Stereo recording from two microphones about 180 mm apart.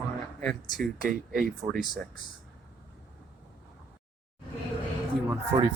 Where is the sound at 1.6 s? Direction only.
Centre (ahead or behind).